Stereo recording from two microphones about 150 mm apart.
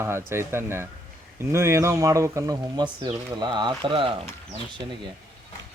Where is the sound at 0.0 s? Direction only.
15° right (ahead or behind); by 4.1 s 35° right (ahead or behind).